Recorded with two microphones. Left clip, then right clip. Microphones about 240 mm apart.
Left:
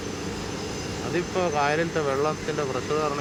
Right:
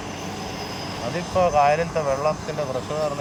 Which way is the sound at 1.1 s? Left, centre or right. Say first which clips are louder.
Right 6 dB; centre.